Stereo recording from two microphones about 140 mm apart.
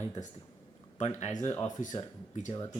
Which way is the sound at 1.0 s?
50° left (ahead or behind).